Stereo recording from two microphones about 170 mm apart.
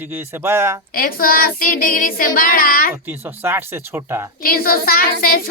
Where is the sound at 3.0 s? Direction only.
15° right (ahead or behind).